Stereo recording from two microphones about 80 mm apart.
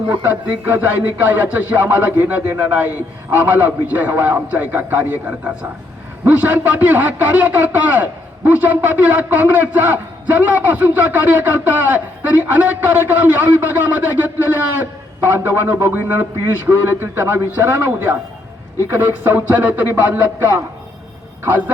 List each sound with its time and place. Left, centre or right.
0.1 s a man's voice: right